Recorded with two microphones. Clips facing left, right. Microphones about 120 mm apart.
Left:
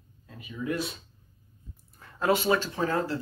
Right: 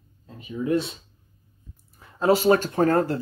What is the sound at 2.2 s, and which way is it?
Speech, 40° right (ahead or behind).